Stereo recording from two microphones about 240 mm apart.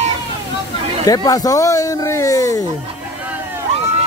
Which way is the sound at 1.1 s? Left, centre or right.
Centre.